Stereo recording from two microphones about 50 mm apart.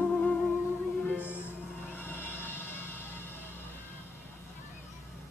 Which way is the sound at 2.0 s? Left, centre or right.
Left.